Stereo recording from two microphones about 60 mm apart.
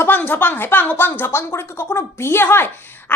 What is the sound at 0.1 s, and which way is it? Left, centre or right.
A woman's voice, left.